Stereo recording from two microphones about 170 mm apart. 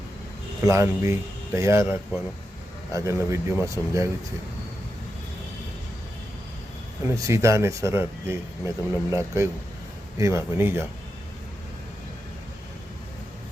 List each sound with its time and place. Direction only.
0.6 s speech: 15° right (ahead or behind)
7.1 s speech: 15° right (ahead or behind)